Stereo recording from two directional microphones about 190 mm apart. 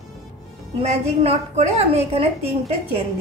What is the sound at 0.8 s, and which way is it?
A woman's voice, 30° right (ahead or behind).